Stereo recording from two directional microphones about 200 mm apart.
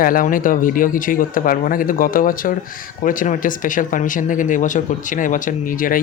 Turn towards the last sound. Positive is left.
turn(degrees=45)  # may be behind; listen again after turning